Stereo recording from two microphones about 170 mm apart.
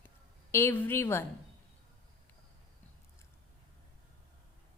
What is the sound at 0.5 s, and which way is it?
Speech, 15° left (ahead or behind).